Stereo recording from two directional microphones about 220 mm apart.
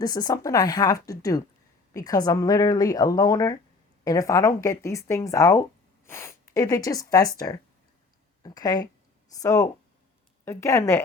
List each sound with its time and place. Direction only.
0.0 s speech: 15° left (ahead or behind)